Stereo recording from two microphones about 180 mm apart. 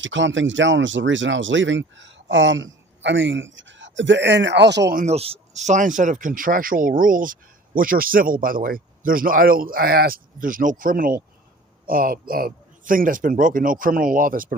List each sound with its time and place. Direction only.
0.0 s speech: 90° right; by 4.9 s 70° right (ahead or behind)
4.9 s speech: 35° right (ahead or behind)